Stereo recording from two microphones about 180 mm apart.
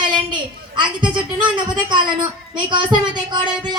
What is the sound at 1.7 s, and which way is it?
A woman's voice, 25° right (ahead or behind).